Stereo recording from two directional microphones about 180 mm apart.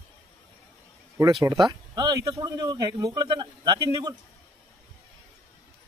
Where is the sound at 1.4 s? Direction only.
20° right (ahead or behind).